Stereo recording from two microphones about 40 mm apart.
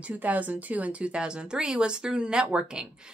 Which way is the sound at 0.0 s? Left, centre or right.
Right.